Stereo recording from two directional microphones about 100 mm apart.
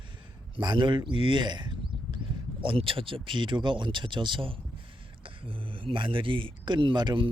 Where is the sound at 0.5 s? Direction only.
50° right (ahead or behind).